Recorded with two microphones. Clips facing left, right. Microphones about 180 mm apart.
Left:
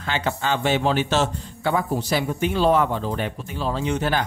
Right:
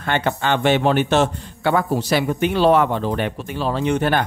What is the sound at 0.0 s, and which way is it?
A man's voice, 60° right (ahead or behind).